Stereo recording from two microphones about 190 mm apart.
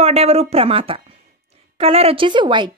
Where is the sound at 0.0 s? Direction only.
35° right (ahead or behind).